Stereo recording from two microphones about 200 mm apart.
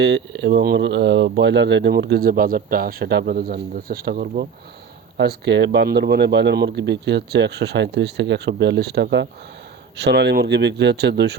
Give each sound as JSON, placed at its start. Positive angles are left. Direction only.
{"t": 0.0, "sound": "speech", "side_deg": -60}